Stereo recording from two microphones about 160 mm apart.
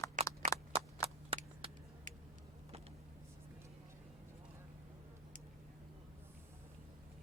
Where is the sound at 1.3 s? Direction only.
35° right (ahead or behind).